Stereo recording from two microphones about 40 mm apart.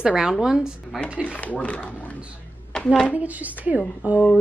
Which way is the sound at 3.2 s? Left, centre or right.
Right.